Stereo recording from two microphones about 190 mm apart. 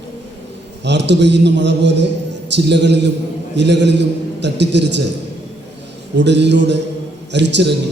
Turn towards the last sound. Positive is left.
turn(degrees=-65)  # may be behind; listen again after turning